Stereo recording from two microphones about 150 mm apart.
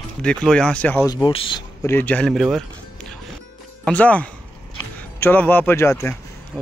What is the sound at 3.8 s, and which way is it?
Speech, 10° left (ahead or behind).